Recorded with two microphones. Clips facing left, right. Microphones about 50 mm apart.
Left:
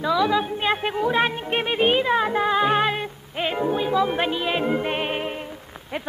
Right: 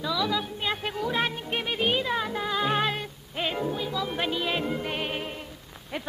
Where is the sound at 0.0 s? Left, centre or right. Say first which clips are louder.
Left 7 dB; left.